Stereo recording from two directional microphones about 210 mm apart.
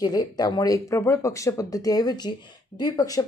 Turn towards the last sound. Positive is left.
turn(degrees=20)  # may be behind; listen again after turning